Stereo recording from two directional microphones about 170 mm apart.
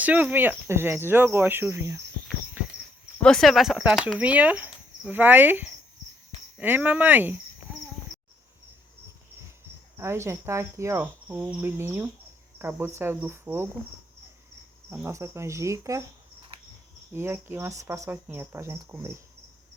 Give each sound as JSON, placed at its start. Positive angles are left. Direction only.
{"t": 0.0, "sound": "cricket", "side_deg": -10}
{"t": 2.6, "sound": "walk", "side_deg": -10}
{"t": 3.2, "sound": "speech", "side_deg": 5}
{"t": 6.6, "sound": "cricket", "side_deg": -10}
{"t": 10.0, "sound": "cricket", "side_deg": -15}
{"t": 14.8, "sound": "cricket", "side_deg": -15}
{"t": 17.1, "sound": "cricket", "side_deg": -15}